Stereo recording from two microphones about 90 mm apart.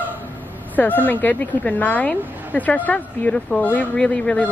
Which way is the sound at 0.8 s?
20° left (ahead or behind).